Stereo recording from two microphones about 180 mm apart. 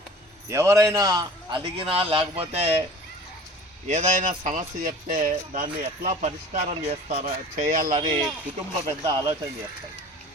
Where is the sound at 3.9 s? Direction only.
45° right (ahead or behind).